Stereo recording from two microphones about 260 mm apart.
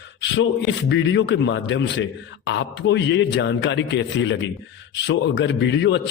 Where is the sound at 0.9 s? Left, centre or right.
Left.